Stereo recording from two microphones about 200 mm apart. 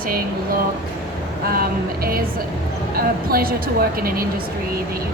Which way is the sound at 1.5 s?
50° right (ahead or behind).